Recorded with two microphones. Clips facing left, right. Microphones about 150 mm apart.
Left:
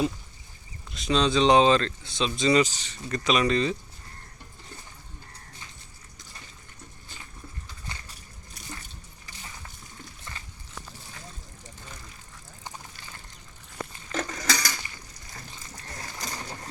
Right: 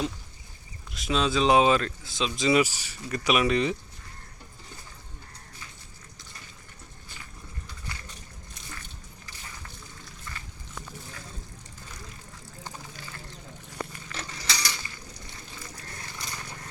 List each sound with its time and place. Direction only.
0.9 s speech: centre (ahead or behind)
14.1 s coin: 45° left (ahead or behind)
16.0 s pigeon: 40° left (ahead or behind)